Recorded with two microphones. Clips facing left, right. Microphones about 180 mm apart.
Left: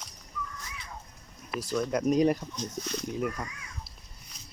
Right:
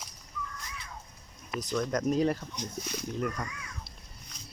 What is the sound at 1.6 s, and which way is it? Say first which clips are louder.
Speech: left 1 dB; 5° left (ahead or behind).